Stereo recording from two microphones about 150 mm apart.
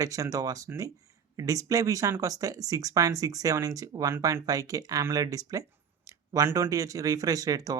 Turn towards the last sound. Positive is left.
turn(degrees=-25)  # may be behind; listen again after turning